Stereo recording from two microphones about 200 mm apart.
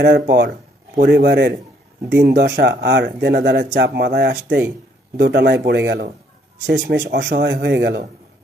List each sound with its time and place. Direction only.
0.0 s speech: 50° right (ahead or behind)